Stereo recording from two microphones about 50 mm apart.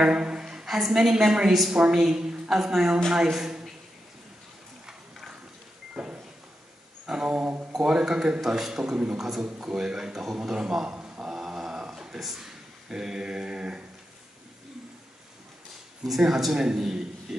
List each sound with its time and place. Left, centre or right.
0.0 s a woman's voice: centre
6.0 s sliding door: centre
7.2 s speech: right
7.7 s a woman's voice: centre
11.1 s a sound: centre
16.0 s a woman's voice: centre